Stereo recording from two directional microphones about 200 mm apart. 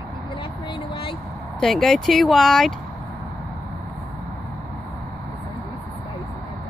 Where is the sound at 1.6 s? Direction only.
Centre (ahead or behind).